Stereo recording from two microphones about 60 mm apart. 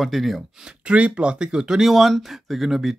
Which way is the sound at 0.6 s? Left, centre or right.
Centre.